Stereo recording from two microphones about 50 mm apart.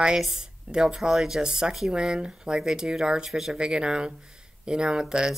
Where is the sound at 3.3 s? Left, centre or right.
Centre.